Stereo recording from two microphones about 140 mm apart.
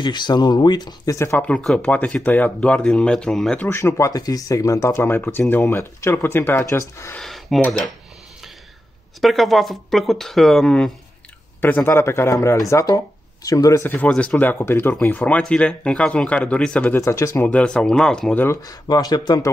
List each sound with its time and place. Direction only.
0.0 s speech: 30° left (ahead or behind)
1.4 s speech: 5° left (ahead or behind)
3.6 s speech: 20° left (ahead or behind)
7.2 s speech: centre (ahead or behind)
9.2 s speech: centre (ahead or behind)
11.6 s speech: 15° left (ahead or behind)
17.5 s speech: 10° left (ahead or behind)
18.7 s speech: 25° left (ahead or behind)